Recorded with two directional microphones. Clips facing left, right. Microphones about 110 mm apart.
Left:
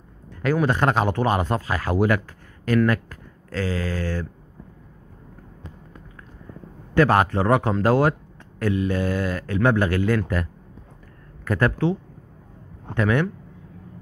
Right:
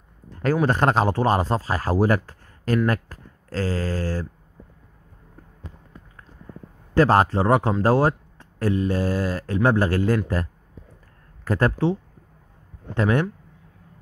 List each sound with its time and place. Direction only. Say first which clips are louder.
0.3 s speech: even; 35° right (ahead or behind)
6.9 s a man's voice: right 1 dB; 35° right (ahead or behind)